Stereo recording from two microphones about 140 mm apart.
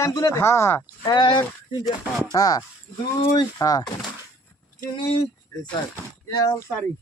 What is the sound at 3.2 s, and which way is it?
Speech, 40° left (ahead or behind).